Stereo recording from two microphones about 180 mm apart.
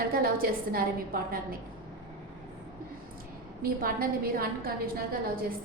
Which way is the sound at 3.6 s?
55° right (ahead or behind).